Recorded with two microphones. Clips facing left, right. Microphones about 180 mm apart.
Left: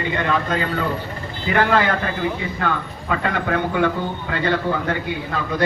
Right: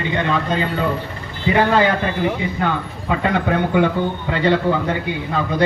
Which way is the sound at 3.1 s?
20° right (ahead or behind).